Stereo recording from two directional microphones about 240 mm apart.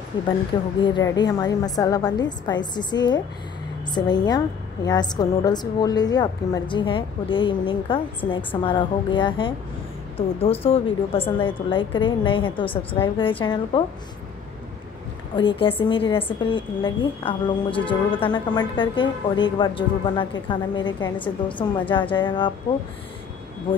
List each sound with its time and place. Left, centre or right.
0.1 s a woman's voice: centre
15.3 s a woman's voice: left